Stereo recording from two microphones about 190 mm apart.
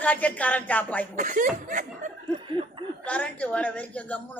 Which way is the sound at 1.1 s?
45° right (ahead or behind).